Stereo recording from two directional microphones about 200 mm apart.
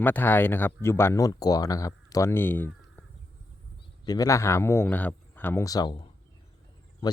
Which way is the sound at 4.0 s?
20° left (ahead or behind).